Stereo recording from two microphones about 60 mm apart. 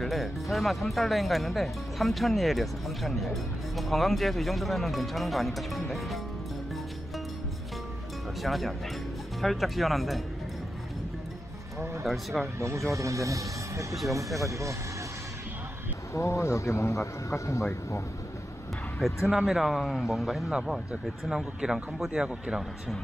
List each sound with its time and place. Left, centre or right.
0.0 s speech: centre
8.4 s speech: centre
12.0 s speech: centre
12.5 s speech: right
16.1 s a man's voice: left
19.0 s speech: centre